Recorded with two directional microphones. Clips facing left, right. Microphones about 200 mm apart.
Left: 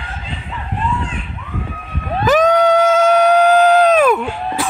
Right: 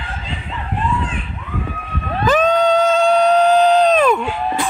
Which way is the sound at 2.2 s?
10° left (ahead or behind).